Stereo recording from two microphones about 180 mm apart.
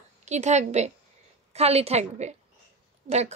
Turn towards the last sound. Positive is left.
turn(degrees=-40)  # may be behind; listen again after turning